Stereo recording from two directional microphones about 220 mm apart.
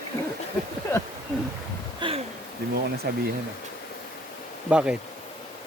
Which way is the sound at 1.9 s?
25° right (ahead or behind).